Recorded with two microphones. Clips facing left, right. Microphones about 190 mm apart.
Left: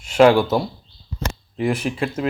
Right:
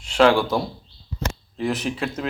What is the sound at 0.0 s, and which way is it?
Speech, 10° left (ahead or behind).